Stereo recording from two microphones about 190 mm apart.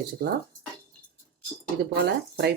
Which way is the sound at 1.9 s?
60° right (ahead or behind).